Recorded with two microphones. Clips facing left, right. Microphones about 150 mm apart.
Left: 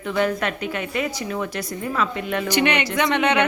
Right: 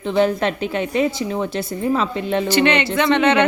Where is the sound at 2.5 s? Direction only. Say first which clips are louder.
Right 3 dB; 15° left (ahead or behind).